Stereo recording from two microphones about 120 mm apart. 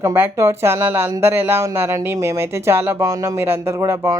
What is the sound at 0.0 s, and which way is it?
A woman's voice, 25° right (ahead or behind).